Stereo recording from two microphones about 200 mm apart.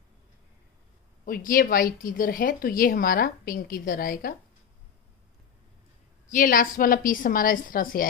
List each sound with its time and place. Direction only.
1.2 s a woman's voice: 45° left (ahead or behind)
6.3 s a woman's voice: 40° left (ahead or behind)